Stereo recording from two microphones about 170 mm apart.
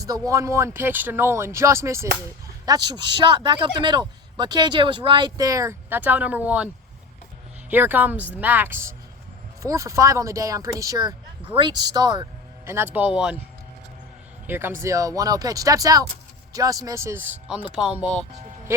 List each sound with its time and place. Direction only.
0.0 s speech: 20° right (ahead or behind)
7.7 s speech: 10° right (ahead or behind)
14.4 s speech: 15° right (ahead or behind)